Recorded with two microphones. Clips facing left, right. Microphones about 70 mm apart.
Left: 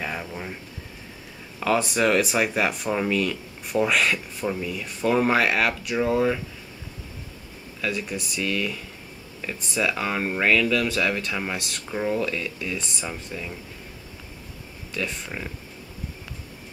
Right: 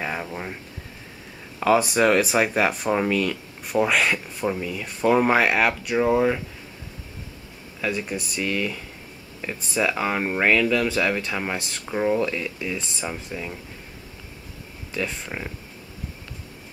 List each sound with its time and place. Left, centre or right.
0.0 s speech: centre
1.6 s speech: centre
7.8 s speech: centre
9.8 s speech: centre